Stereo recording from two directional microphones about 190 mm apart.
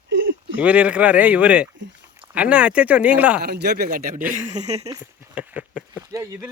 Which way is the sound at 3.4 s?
60° right (ahead or behind).